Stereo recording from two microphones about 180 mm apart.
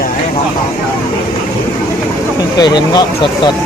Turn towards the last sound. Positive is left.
turn(degrees=25)  # may be behind; listen again after turning